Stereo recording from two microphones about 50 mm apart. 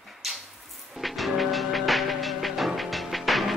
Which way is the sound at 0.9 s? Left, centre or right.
Centre.